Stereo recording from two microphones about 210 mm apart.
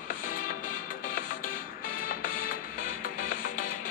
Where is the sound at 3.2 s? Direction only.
40° left (ahead or behind).